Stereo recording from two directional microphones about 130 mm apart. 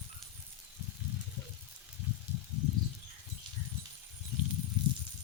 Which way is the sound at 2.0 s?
15° right (ahead or behind).